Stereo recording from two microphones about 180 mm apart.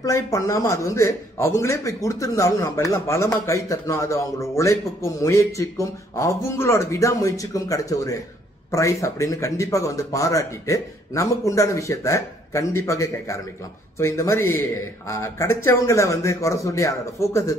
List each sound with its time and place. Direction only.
0.0 s a man's voice: 20° left (ahead or behind)